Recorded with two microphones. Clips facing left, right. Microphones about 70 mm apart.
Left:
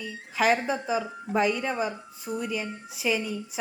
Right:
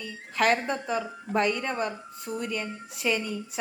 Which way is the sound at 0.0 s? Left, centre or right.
Centre.